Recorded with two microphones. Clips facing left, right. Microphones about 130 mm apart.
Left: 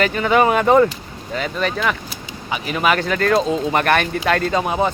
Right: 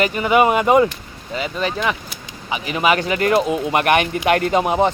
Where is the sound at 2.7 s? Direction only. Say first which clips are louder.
Right 1 dB; 15° right (ahead or behind).